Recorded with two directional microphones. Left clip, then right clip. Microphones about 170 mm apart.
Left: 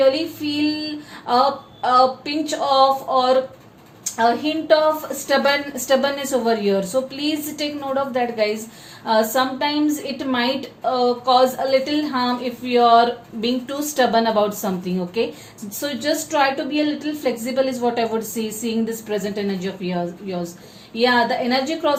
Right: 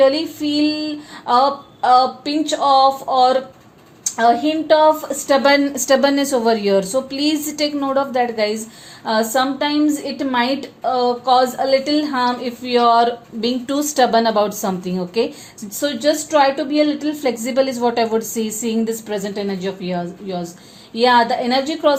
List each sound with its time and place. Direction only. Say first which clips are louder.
0.4 s a woman's voice: right 5 dB; 40° right (ahead or behind)